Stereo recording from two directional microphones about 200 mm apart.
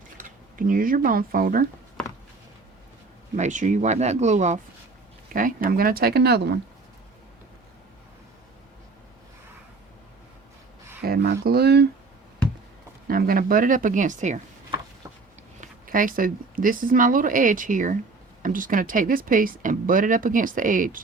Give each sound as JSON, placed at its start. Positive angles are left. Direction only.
{"t": 0.2, "sound": "speech", "side_deg": -40}
{"t": 3.3, "sound": "speech", "side_deg": -35}
{"t": 11.0, "sound": "speech", "side_deg": -50}
{"t": 13.1, "sound": "speech", "side_deg": -45}
{"t": 15.6, "sound": "speech", "side_deg": -40}